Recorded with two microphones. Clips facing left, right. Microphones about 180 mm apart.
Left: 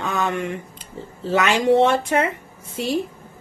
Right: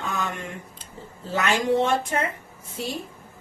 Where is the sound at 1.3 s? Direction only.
75° left (ahead or behind).